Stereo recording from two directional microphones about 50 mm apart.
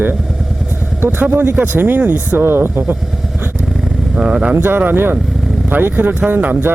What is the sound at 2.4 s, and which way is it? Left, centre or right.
Speech, right.